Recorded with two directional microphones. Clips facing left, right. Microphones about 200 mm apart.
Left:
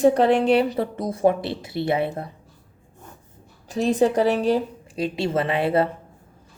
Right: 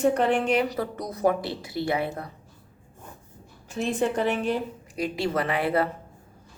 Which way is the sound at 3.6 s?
40° left (ahead or behind).